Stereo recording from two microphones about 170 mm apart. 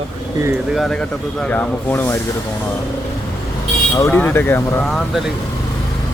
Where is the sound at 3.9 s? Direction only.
15° left (ahead or behind).